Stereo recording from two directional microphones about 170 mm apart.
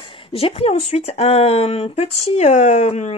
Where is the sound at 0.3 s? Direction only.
35° left (ahead or behind).